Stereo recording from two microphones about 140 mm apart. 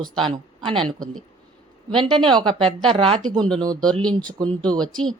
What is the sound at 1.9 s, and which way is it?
A woman's voice, 35° right (ahead or behind).